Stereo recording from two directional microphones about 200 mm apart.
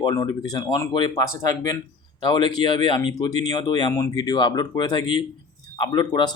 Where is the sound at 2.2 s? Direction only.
25° left (ahead or behind).